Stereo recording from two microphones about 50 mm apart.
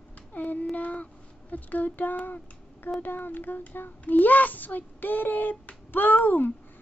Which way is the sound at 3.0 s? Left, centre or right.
Left.